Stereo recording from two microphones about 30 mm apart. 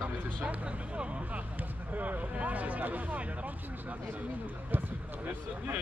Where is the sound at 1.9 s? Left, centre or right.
Right.